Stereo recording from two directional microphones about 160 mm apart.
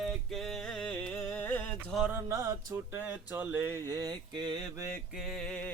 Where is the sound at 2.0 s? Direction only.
15° right (ahead or behind).